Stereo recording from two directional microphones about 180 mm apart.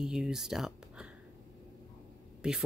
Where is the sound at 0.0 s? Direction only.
5° right (ahead or behind).